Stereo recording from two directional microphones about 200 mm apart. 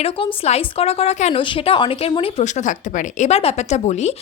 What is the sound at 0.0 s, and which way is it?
Speech, 30° left (ahead or behind).